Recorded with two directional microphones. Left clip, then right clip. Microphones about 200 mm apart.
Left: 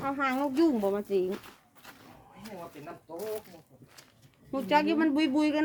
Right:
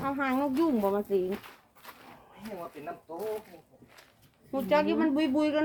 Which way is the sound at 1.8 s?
10° right (ahead or behind).